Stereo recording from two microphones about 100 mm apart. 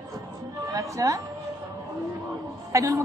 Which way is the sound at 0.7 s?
35° right (ahead or behind).